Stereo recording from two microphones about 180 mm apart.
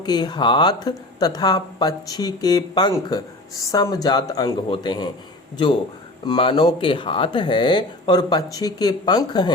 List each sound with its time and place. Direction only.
0.0 s speech: 25° left (ahead or behind)
6.2 s speech: 25° left (ahead or behind)